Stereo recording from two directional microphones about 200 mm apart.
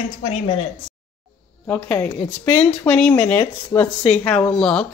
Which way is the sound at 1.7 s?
5° left (ahead or behind).